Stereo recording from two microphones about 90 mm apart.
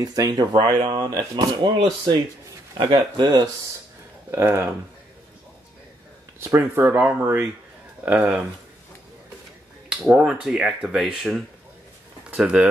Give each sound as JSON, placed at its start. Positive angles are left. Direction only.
{"t": 0.0, "sound": "speech", "side_deg": -45}
{"t": 2.8, "sound": "speech", "side_deg": -55}
{"t": 4.3, "sound": "speech", "side_deg": -25}
{"t": 6.4, "sound": "speech", "side_deg": -25}
{"t": 9.8, "sound": "speech", "side_deg": -5}